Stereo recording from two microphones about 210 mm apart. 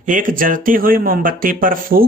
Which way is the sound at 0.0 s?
40° right (ahead or behind).